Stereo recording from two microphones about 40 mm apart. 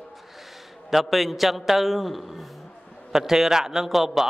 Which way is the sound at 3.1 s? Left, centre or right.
Centre.